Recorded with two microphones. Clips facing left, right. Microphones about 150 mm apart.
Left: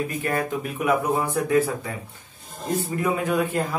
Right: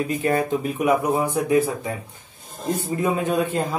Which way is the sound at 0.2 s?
25° right (ahead or behind).